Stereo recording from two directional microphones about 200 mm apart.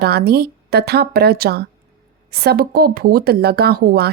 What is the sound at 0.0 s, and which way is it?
A woman's voice, 55° right (ahead or behind).